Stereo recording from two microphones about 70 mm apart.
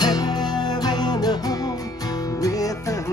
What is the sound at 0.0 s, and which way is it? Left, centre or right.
Music, left.